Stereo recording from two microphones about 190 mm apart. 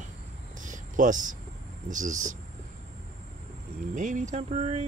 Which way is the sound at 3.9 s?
40° right (ahead or behind).